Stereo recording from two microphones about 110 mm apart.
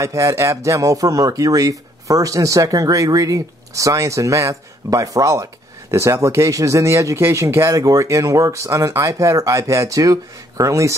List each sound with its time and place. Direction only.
0.0 s speech: 25° right (ahead or behind)